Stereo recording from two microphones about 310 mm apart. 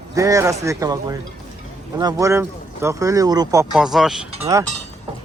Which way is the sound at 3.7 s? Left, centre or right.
Centre.